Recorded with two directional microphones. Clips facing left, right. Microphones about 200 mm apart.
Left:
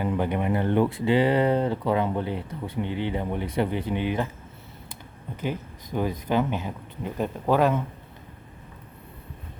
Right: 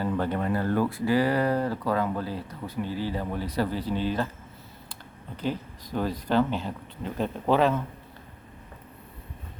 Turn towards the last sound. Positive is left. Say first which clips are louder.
# left 1 dB
turn(degrees=10)  # may be behind; listen again after turning